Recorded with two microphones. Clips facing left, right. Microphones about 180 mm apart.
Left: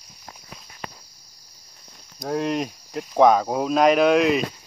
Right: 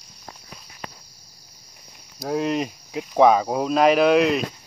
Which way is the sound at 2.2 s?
Centre (ahead or behind).